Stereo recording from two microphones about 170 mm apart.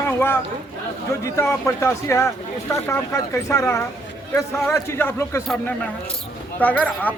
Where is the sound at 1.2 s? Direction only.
15° left (ahead or behind).